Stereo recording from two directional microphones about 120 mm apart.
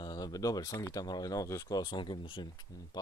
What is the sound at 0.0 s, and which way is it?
Speech, 35° left (ahead or behind).